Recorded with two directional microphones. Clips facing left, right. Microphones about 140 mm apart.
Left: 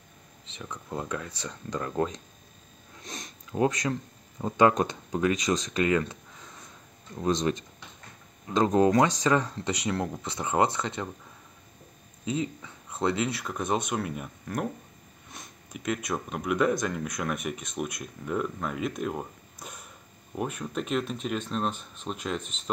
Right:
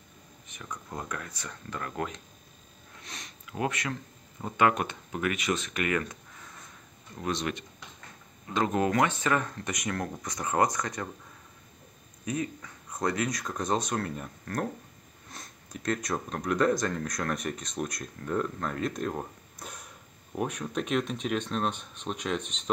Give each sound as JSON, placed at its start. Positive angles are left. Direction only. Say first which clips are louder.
{"t": 0.7, "sound": "speech", "louder": "left 3 dB", "side_deg": 10}
{"t": 1.0, "sound": "speech", "louder": "left 4 dB", "side_deg": 25}
{"t": 3.0, "sound": "sniff", "louder": "left 5 dB", "side_deg": 40}
{"t": 3.5, "sound": "speech", "louder": "left 6 dB", "side_deg": 30}
{"t": 8.7, "sound": "speech", "louder": "left 5 dB", "side_deg": 25}
{"t": 12.3, "sound": "speech", "louder": "left 2 dB", "side_deg": 25}
{"t": 13.4, "sound": "speech", "louder": "left 1 dB", "side_deg": 10}